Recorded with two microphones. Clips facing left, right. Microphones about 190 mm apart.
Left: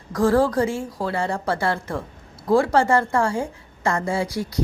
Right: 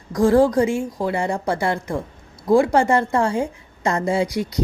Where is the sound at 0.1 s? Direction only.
15° right (ahead or behind).